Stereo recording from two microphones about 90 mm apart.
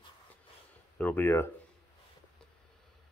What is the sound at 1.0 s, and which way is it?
Speech, 20° left (ahead or behind).